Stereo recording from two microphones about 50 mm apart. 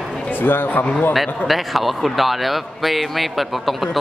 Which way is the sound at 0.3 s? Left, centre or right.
Left.